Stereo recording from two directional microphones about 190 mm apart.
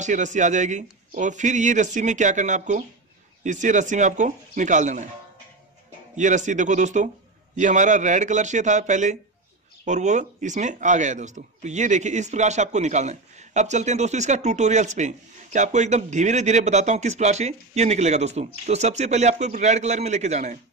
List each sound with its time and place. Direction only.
0.0 s speech: 40° right (ahead or behind)
6.1 s speech: 40° right (ahead or behind)